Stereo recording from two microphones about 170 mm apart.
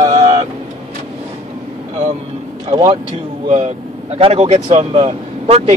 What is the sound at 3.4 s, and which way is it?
Speech, 40° right (ahead or behind).